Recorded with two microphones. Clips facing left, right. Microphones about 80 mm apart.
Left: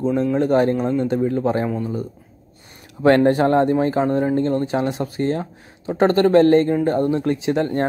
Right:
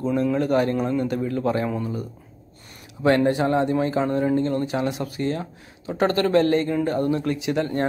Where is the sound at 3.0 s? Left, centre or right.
Left.